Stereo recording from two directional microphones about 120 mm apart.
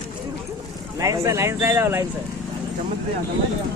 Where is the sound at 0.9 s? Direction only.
25° right (ahead or behind).